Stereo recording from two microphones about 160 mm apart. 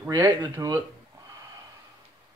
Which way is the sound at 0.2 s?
20° right (ahead or behind).